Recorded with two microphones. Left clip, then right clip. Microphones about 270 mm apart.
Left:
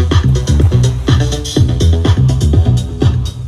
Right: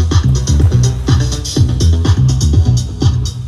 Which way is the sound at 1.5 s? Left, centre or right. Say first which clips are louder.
Left 2 dB; centre.